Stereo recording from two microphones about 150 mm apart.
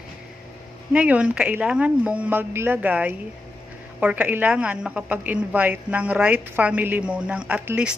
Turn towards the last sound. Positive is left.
turn(degrees=-10)  # may be behind; listen again after turning